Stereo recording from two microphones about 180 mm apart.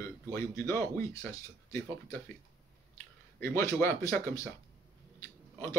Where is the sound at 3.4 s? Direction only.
15° left (ahead or behind).